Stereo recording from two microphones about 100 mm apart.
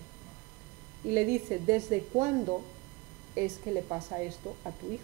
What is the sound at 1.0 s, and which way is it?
A woman's voice, 15° right (ahead or behind).